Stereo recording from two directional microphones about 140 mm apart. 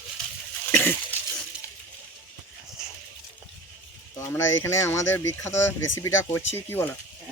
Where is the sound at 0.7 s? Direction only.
10° left (ahead or behind).